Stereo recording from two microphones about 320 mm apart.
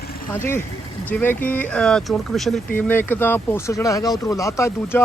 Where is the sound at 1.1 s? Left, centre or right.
Centre.